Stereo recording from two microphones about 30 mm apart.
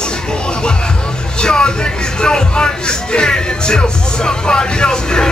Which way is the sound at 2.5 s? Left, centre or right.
Left.